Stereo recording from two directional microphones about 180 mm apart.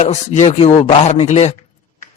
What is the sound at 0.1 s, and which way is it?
A man's voice, 40° left (ahead or behind).